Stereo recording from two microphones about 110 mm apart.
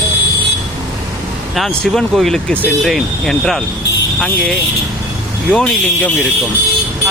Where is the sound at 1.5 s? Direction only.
Centre (ahead or behind).